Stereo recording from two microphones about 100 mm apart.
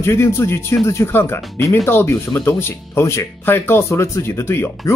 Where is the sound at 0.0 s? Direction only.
25° left (ahead or behind).